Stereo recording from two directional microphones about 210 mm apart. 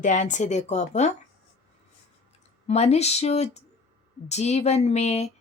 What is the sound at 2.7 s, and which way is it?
A woman's voice, 30° left (ahead or behind).